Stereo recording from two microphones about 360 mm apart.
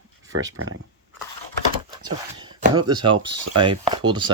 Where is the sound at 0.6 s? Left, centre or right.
Right.